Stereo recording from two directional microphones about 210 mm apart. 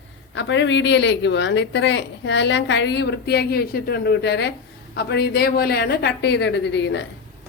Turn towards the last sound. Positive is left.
turn(degrees=60)  # may be behind; listen again after turning